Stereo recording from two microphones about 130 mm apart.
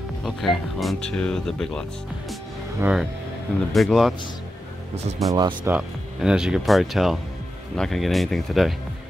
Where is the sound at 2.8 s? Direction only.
5° right (ahead or behind).